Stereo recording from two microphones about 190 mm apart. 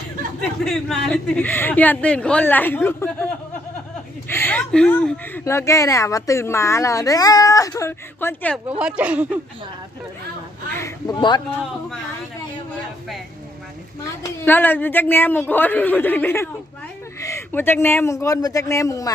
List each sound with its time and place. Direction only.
0.6 s speech: centre (ahead or behind)
4.3 s speech: 10° left (ahead or behind)
8.8 s speech: 5° right (ahead or behind)
10.8 s a sound: 20° left (ahead or behind)
14.2 s speech: 10° left (ahead or behind)